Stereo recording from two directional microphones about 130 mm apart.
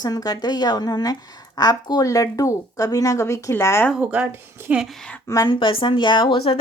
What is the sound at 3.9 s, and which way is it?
Speech, 10° right (ahead or behind).